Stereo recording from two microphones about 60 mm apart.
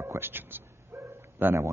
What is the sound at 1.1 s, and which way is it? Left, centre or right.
Bow-wow, right.